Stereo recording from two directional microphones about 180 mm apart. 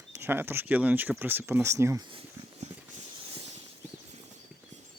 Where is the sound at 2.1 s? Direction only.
30° right (ahead or behind).